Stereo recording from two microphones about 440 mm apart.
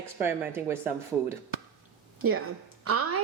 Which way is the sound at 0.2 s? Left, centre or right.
Centre.